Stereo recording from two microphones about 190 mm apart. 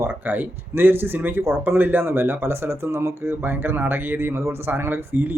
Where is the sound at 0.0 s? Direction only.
10° right (ahead or behind).